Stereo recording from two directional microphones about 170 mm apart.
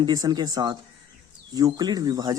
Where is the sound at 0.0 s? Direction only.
25° right (ahead or behind).